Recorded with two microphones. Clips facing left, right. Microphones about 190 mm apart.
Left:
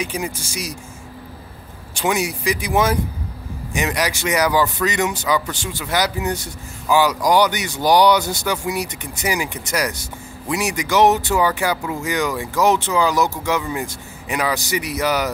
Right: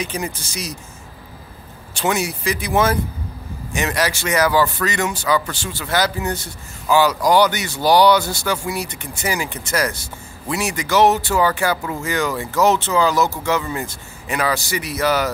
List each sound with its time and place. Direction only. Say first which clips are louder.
0.0 s speech: even; 10° left (ahead or behind)
2.0 s speech: even; 15° left (ahead or behind)